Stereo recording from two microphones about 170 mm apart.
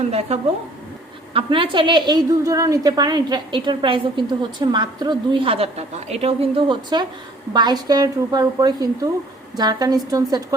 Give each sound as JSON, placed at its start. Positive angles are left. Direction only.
{"t": 0.1, "sound": "a woman's voice", "side_deg": -40}